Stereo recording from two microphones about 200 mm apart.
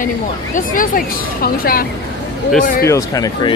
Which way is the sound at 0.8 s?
45° left (ahead or behind).